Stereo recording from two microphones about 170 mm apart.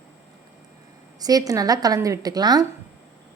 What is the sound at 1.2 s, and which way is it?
A woman's voice, 20° right (ahead or behind).